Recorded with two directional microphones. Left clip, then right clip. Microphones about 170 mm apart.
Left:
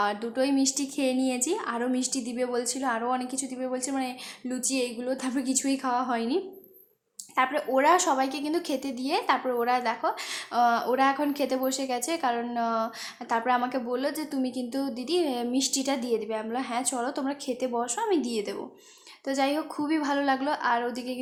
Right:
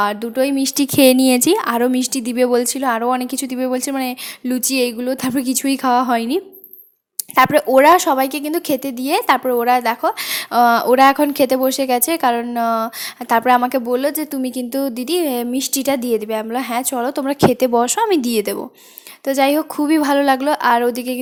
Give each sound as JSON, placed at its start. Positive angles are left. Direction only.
{"t": 0.0, "sound": "speech", "side_deg": -40}